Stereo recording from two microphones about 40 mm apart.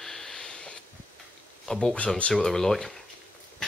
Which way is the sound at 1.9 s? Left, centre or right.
Left.